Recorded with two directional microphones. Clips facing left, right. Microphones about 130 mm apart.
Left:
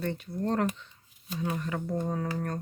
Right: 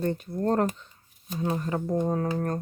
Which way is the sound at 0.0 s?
45° right (ahead or behind).